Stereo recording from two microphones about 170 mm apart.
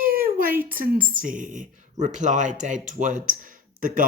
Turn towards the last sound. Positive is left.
turn(degrees=-55)  # may be behind; listen again after turning